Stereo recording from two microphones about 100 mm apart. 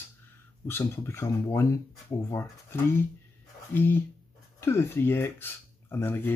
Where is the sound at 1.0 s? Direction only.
25° left (ahead or behind).